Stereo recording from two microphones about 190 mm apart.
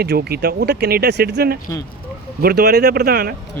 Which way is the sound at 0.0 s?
55° right (ahead or behind).